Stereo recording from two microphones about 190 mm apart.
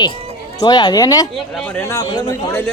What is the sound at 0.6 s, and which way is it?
Speech, 20° left (ahead or behind).